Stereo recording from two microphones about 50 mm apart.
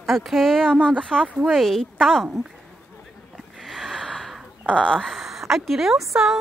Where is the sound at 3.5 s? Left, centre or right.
Centre.